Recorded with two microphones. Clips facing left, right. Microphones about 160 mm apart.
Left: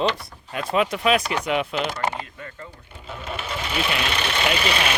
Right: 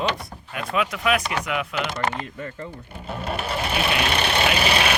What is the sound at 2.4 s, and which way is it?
Speech, 35° right (ahead or behind).